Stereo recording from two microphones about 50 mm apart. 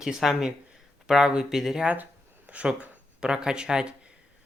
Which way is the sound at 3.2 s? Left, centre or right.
Centre.